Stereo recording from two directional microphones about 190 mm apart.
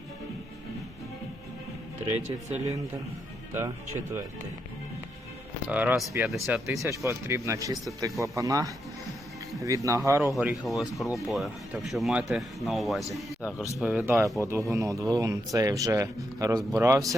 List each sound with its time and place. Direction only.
2.1 s speech: 35° right (ahead or behind)
3.5 s speech: 15° right (ahead or behind)
5.6 s speech: 10° right (ahead or behind)
10.3 s speech: centre (ahead or behind)